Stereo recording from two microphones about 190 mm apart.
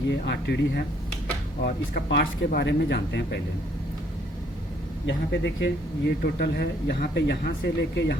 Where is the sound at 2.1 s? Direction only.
65° left (ahead or behind).